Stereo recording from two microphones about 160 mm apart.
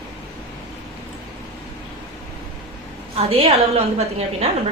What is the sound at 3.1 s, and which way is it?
A woman's voice, 40° right (ahead or behind).